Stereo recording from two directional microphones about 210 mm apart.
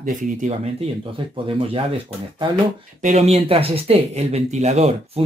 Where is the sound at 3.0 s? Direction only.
35° right (ahead or behind).